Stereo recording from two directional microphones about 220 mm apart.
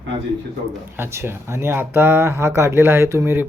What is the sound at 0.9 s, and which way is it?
Speech, 10° right (ahead or behind).